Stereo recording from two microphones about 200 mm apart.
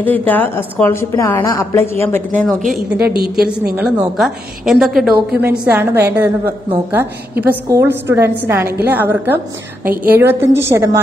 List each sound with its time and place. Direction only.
0.0 s a woman's voice: 10° left (ahead or behind)
3.0 s a woman's voice: 50° right (ahead or behind)
4.2 s a woman's voice: centre (ahead or behind)